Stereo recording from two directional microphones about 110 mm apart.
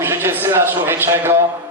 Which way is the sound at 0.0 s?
20° right (ahead or behind).